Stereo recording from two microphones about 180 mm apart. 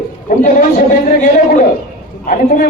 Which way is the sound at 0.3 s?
55° left (ahead or behind).